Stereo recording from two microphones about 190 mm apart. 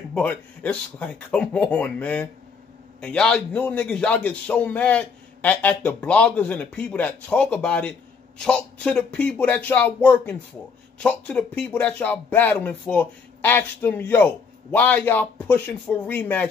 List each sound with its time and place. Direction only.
0.1 s speech: 5° left (ahead or behind)